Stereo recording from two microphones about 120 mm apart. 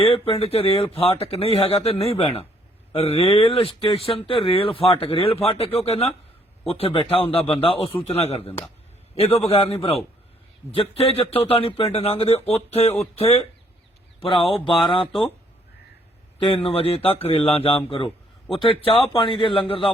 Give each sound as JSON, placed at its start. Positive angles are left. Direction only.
{"t": 0.0, "sound": "a man's voice", "side_deg": 50}
{"t": 14.2, "sound": "a man's voice", "side_deg": 45}
{"t": 16.4, "sound": "a man's voice", "side_deg": 45}